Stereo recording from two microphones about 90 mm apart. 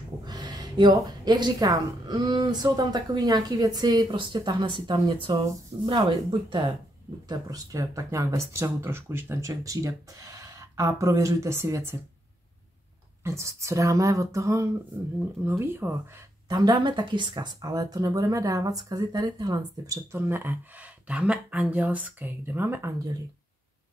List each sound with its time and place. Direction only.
0.2 s a sound: 50° right (ahead or behind)
0.9 s speech: 50° right (ahead or behind)
2.1 s speech: 65° right (ahead or behind)
5.1 s speech: 70° right (ahead or behind)
7.2 s speech: 40° right (ahead or behind)
13.2 s speech: 30° right (ahead or behind)
16.4 s speech: 50° right (ahead or behind)
20.1 s speech: 30° right (ahead or behind)